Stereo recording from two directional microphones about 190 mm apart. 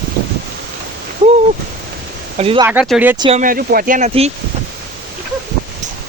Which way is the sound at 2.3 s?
30° right (ahead or behind).